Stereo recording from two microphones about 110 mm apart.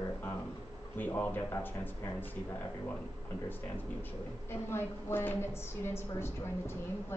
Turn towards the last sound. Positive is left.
turn(degrees=20)  # may be behind; listen again after turning